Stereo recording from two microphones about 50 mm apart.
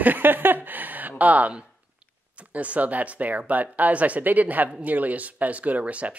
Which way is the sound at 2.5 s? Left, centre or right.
Right.